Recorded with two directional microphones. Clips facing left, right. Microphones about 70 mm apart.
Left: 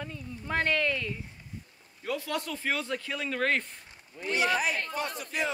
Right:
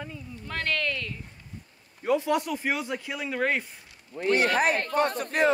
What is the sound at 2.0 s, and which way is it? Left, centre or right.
Speech, right.